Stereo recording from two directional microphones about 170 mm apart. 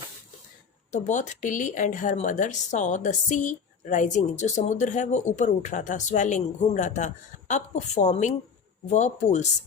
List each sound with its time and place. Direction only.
0.9 s speech: 45° left (ahead or behind)